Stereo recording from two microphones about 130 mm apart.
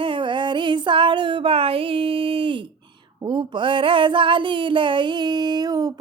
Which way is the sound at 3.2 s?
40° right (ahead or behind).